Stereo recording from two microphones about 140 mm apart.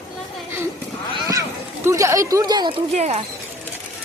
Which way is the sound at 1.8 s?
20° right (ahead or behind).